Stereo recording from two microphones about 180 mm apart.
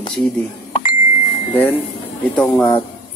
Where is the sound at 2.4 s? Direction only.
10° left (ahead or behind).